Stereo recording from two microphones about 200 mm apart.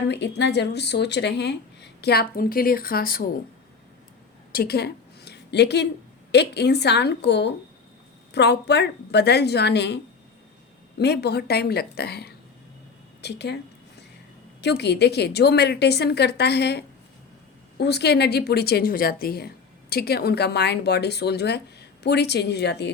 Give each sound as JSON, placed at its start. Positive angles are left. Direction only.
{"t": 0.1, "sound": "speech", "side_deg": 60}
{"t": 4.5, "sound": "a woman's voice", "side_deg": 50}
{"t": 14.6, "sound": "speech", "side_deg": 55}